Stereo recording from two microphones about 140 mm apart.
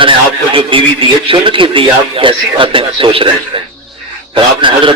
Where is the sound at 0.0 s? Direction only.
40° right (ahead or behind).